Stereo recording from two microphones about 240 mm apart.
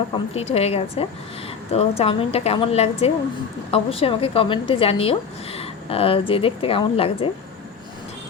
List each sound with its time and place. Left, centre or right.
0.1 s a woman's voice: left